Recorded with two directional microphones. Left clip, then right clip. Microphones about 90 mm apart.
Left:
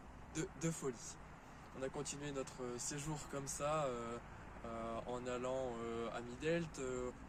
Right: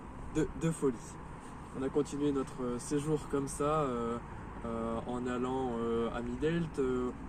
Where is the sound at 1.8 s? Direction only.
50° left (ahead or behind).